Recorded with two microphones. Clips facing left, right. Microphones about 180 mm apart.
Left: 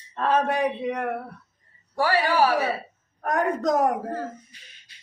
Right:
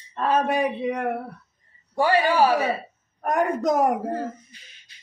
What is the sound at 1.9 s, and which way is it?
Speech, 20° right (ahead or behind).